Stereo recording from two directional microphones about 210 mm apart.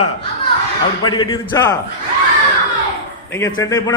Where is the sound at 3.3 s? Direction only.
15° left (ahead or behind).